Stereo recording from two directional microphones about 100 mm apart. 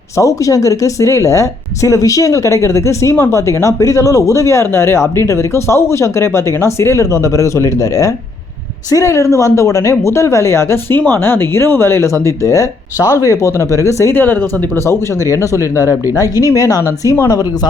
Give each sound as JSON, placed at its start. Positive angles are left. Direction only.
{"t": 0.2, "sound": "speech", "side_deg": 35}